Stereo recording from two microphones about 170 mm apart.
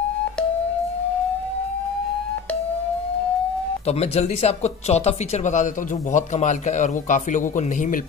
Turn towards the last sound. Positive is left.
turn(degrees=45)  # may be behind; listen again after turning